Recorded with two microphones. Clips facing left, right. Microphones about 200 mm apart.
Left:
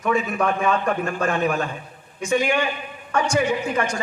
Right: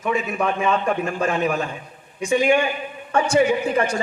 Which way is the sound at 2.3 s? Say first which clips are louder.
Right 3 dB; 25° right (ahead or behind).